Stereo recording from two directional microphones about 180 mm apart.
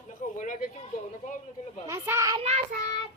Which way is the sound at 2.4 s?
35° right (ahead or behind).